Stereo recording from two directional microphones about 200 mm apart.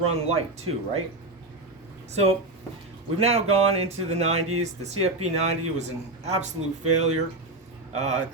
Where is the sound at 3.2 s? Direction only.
30° right (ahead or behind).